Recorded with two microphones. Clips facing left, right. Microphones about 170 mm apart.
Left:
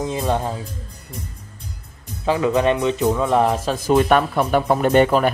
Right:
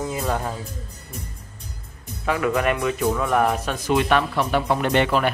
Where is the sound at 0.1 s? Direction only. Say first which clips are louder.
Left 4 dB; 25° left (ahead or behind).